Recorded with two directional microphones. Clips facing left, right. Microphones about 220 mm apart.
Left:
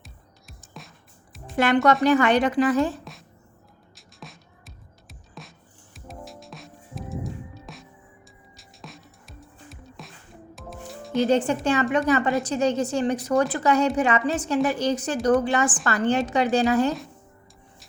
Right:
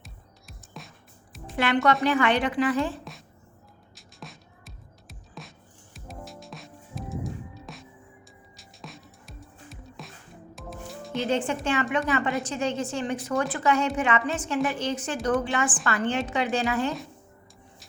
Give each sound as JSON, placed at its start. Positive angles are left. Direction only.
{"t": 0.0, "sound": "music", "side_deg": 0}
{"t": 1.5, "sound": "speech", "side_deg": 40}
{"t": 3.0, "sound": "a sound", "side_deg": 0}
{"t": 3.9, "sound": "music", "side_deg": 0}
{"t": 11.3, "sound": "a woman's voice", "side_deg": 40}